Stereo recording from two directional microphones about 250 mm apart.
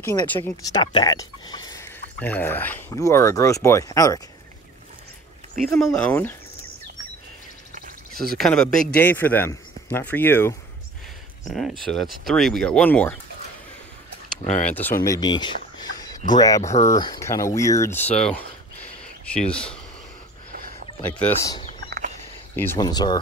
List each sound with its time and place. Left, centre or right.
0.0 s speech: centre
5.7 s speech: centre
8.4 s speech: centre
14.4 s speech: left
14.7 s speech: centre
21.2 s speech: centre
22.8 s speech: centre